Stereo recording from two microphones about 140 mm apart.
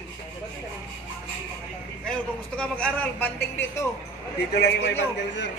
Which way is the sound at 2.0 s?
5° left (ahead or behind).